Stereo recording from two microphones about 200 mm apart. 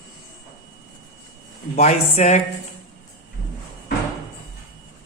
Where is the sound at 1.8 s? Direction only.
35° left (ahead or behind).